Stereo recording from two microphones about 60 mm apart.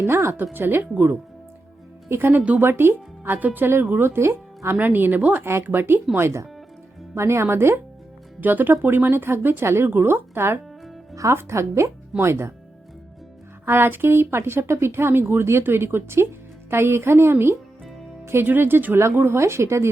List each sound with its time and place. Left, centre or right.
0.0 s speech: right
2.0 s speech: right
3.3 s speech: right
8.4 s speech: right
11.1 s speech: right
11.3 s speech: right
13.7 s speech: right